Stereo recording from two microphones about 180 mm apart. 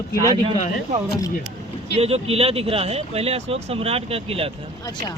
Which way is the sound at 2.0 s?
35° right (ahead or behind).